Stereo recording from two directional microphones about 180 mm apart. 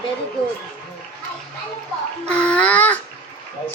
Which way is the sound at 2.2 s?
5° left (ahead or behind).